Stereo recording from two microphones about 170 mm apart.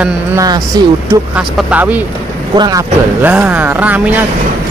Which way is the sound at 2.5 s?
25° right (ahead or behind).